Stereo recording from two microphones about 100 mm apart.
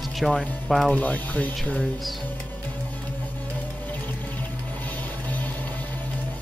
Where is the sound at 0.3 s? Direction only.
10° left (ahead or behind).